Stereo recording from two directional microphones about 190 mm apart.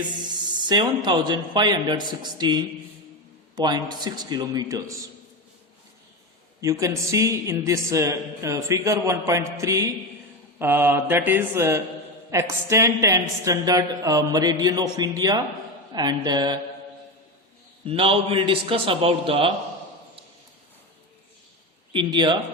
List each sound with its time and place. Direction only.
0.7 s a woman's voice: 20° right (ahead or behind)
6.6 s a man's voice: 15° right (ahead or behind)
17.8 s a woman's voice: 30° right (ahead or behind)
21.9 s a woman's voice: 25° right (ahead or behind)